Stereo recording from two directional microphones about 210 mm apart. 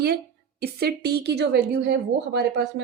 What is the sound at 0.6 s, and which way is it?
A woman's voice, 50° right (ahead or behind).